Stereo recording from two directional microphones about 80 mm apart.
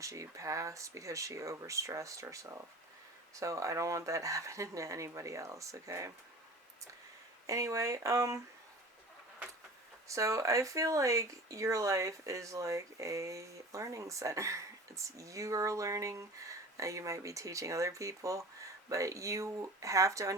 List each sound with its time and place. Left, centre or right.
0.0 s speech: right
7.4 s speech: right
10.1 s speech: right